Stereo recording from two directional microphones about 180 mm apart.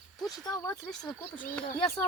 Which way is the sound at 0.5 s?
15° left (ahead or behind).